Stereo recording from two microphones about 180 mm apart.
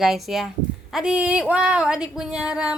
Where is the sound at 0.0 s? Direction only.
Centre (ahead or behind).